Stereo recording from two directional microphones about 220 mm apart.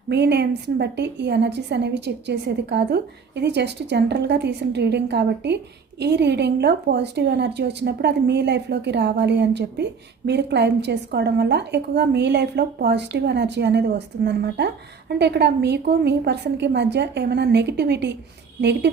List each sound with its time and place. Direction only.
0.1 s a woman's voice: 50° right (ahead or behind)